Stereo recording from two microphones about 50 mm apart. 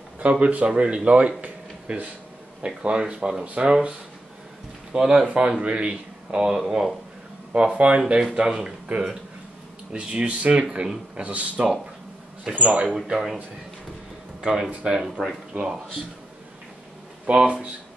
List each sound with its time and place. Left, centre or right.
0.2 s speech: right
4.9 s speech: centre
7.5 s speech: right
9.9 s speech: right
12.8 s speech: centre
14.4 s speech: centre
17.3 s speech: right